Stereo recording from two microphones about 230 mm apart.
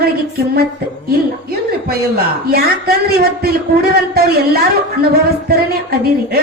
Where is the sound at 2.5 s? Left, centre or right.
Right.